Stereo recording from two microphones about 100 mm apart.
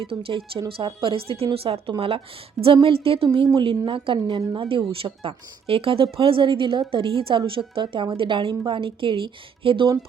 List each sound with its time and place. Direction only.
0.1 s a woman's voice: 65° right (ahead or behind)